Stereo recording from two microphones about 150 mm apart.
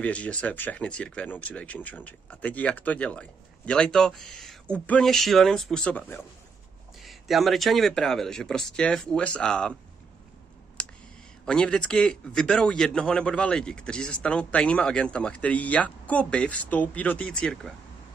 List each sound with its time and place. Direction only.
0.0 s a man's voice: 10° left (ahead or behind)
10.8 s a sound: 5° left (ahead or behind)
11.4 s a man's voice: 5° left (ahead or behind)